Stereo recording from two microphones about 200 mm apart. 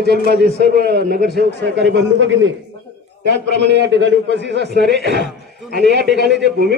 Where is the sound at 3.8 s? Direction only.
60° right (ahead or behind).